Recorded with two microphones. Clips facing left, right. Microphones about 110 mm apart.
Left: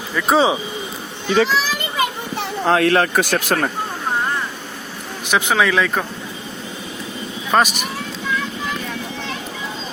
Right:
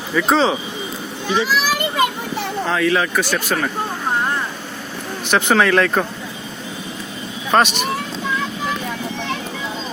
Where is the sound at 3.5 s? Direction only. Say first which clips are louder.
Left 2 dB; 45° left (ahead or behind).